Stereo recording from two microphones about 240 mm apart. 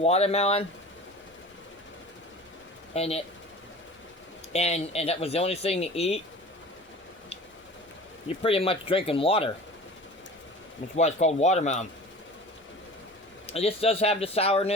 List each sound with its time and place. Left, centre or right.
0.0 s speech: left
2.9 s speech: left
4.5 s speech: left
8.3 s speech: left
10.9 s speech: left
13.5 s speech: left